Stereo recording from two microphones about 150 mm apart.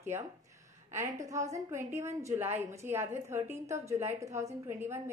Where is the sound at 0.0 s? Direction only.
20° right (ahead or behind).